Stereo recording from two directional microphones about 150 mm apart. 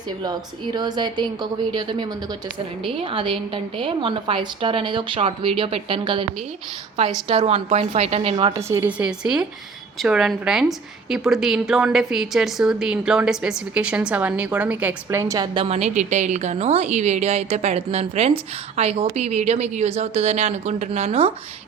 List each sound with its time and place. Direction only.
0.2 s a woman's voice: 30° right (ahead or behind)
7.3 s a woman's voice: 40° right (ahead or behind)
8.5 s a woman's voice: 20° right (ahead or behind)
8.9 s a woman's voice: 5° right (ahead or behind)
15.2 s a woman's voice: 20° right (ahead or behind)
15.5 s a woman's voice: 45° right (ahead or behind)